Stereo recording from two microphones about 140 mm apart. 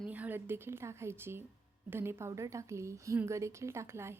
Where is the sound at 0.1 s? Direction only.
10° right (ahead or behind).